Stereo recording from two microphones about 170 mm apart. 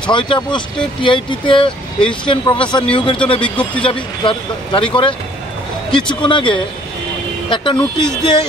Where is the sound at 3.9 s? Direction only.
30° left (ahead or behind).